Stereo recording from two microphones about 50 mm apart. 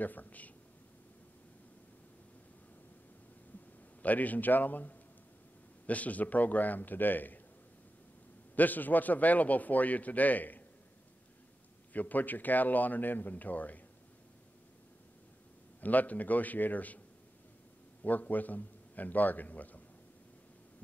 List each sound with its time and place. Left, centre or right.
0.0 s a man's voice: left
4.0 s a man's voice: left
8.5 s a man's voice: left
11.9 s a man's voice: left
15.8 s a man's voice: left
18.0 s a man's voice: left